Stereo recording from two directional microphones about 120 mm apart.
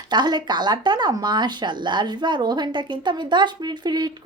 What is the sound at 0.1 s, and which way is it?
Speech, 35° right (ahead or behind).